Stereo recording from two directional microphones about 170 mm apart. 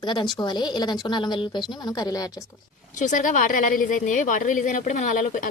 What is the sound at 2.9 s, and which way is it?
A woman's voice, 45° left (ahead or behind).